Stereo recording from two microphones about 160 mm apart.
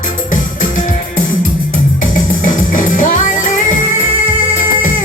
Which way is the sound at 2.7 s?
55° left (ahead or behind).